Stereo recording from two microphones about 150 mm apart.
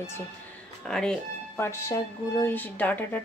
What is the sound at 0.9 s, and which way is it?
Speech, 5° left (ahead or behind).